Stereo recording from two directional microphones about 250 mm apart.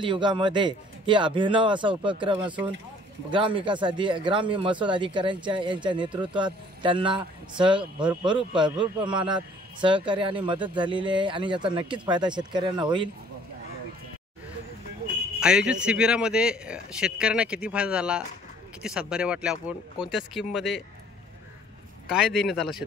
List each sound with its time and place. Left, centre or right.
0.0 s a man's voice: centre
15.4 s a man's voice: centre
22.0 s a man's voice: centre